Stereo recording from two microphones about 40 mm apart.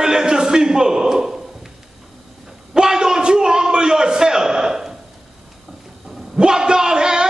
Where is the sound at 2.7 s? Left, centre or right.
Centre.